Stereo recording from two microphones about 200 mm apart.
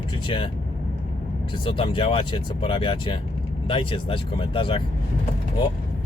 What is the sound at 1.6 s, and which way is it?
Speech, 25° left (ahead or behind).